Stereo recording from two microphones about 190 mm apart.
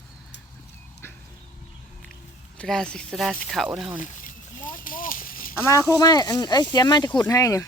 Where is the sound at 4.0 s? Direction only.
40° left (ahead or behind).